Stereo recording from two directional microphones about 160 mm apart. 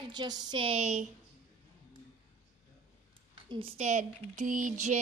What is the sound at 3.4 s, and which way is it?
Speech, 35° right (ahead or behind).